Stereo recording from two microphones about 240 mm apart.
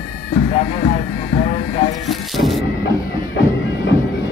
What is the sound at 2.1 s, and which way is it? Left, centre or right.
Music, centre.